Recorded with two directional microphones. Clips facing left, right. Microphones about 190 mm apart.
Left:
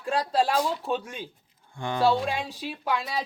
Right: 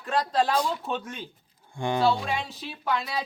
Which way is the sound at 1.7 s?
15° right (ahead or behind).